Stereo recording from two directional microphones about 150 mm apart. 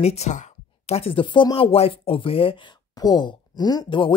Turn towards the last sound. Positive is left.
turn(degrees=30)  # may be behind; listen again after turning